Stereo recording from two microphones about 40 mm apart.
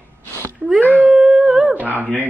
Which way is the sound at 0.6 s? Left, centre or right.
Right.